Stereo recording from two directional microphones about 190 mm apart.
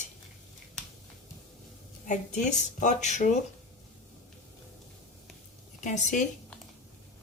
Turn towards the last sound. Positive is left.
turn(degrees=40)  # may be behind; listen again after turning